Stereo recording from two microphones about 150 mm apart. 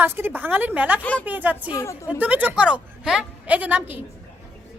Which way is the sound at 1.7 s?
20° left (ahead or behind).